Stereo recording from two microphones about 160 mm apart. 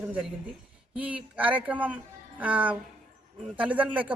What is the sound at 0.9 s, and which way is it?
Speech, 10° right (ahead or behind).